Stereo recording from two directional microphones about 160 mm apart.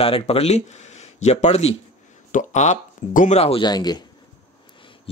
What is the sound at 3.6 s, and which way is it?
Speech, 25° left (ahead or behind).